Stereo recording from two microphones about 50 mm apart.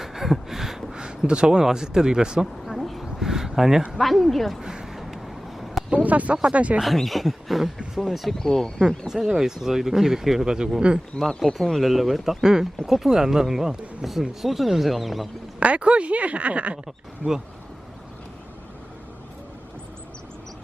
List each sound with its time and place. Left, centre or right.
0.0 s a sound: centre
0.9 s speech: centre
2.6 s a sound: centre
3.9 s speech: centre
4.6 s a sound: centre
5.9 s speech: right
6.8 s speech: centre
8.4 s speech: centre
9.2 s speech: centre
11.3 s speech: centre
11.5 s speech: centre
15.6 s speech: right